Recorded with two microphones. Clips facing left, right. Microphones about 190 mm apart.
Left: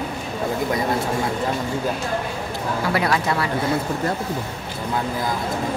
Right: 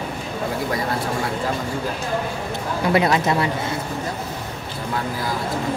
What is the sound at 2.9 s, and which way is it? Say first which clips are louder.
Speech: right 4 dB; 20° right (ahead or behind).